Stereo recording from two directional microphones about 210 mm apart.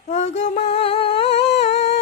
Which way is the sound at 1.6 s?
30° left (ahead or behind).